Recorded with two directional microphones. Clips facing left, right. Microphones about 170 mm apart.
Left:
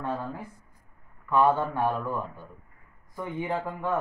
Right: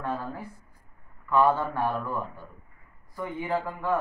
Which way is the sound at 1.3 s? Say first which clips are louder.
Even; 15° left (ahead or behind).